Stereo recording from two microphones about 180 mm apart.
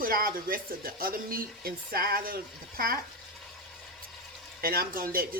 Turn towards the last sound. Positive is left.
turn(degrees=-55)  # may be behind; listen again after turning